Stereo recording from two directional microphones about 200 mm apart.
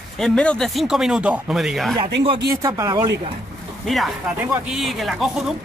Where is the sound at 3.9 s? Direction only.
Centre (ahead or behind).